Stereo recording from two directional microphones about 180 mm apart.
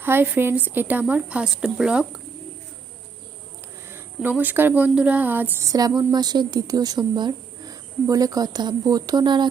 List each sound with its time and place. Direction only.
0.0 s speech: 10° right (ahead or behind)
3.9 s speech: 10° right (ahead or behind)